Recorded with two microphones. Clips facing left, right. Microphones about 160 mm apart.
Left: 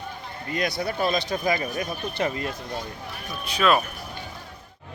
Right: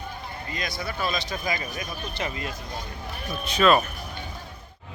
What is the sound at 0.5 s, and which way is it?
Speech, 60° left (ahead or behind).